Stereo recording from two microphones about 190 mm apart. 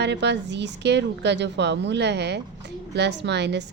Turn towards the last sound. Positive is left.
turn(degrees=-65)  # may be behind; listen again after turning